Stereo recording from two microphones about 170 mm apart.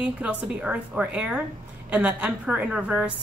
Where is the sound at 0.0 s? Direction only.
5° right (ahead or behind).